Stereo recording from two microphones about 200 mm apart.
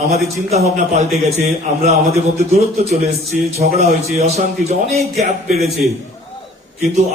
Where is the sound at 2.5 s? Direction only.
30° right (ahead or behind).